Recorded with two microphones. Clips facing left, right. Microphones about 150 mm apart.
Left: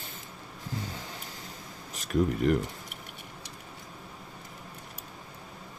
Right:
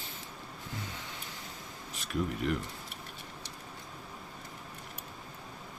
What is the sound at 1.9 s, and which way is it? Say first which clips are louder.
Speech: left 7 dB; 40° left (ahead or behind).